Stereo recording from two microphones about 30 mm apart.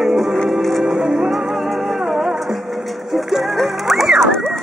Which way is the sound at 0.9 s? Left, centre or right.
Centre.